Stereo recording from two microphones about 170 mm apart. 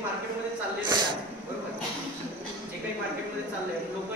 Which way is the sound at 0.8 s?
25° right (ahead or behind).